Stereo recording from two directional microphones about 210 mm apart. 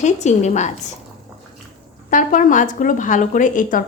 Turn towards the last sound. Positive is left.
turn(degrees=40)  # may be behind; listen again after turning